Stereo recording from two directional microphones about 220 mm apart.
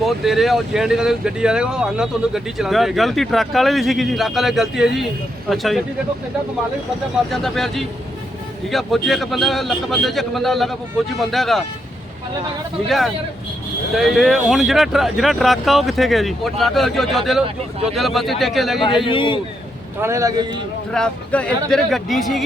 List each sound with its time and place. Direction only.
0.0 s speech: centre (ahead or behind)
7.3 s speech: centre (ahead or behind)
13.9 s speech: centre (ahead or behind)
19.0 s a man's voice: 25° left (ahead or behind)
20.0 s speech: 15° right (ahead or behind)
20.9 s speech: 5° left (ahead or behind)